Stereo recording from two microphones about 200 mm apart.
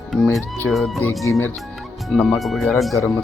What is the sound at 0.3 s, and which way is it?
Speech, centre (ahead or behind).